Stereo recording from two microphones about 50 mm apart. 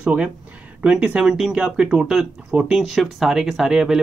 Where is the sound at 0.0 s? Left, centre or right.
Right.